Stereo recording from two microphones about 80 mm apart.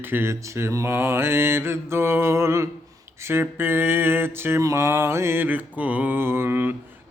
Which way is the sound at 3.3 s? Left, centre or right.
Right.